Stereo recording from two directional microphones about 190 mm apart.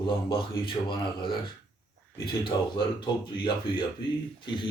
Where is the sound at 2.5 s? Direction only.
20° left (ahead or behind).